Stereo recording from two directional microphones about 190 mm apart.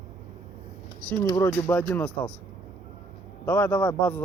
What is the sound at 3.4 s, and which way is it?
Speech, 10° left (ahead or behind).